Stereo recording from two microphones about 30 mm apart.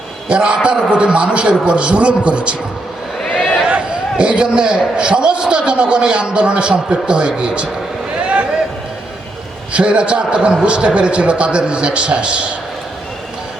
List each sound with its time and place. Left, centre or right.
0.3 s a man's voice: right
3.7 s a man's voice: right
8.2 s a sound: right
9.7 s a man's voice: right